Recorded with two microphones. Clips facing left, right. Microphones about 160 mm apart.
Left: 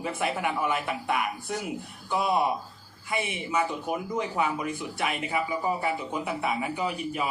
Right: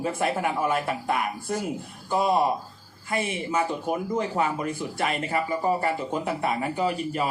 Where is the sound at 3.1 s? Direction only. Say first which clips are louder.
Right 3 dB; 50° right (ahead or behind).